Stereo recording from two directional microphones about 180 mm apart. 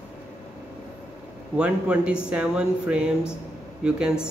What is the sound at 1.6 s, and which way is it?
Speech, 5° right (ahead or behind).